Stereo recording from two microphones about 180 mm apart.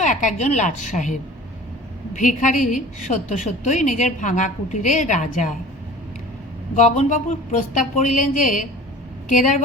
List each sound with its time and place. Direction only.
0.0 s a woman's voice: 45° left (ahead or behind)
6.7 s a woman's voice: 40° left (ahead or behind)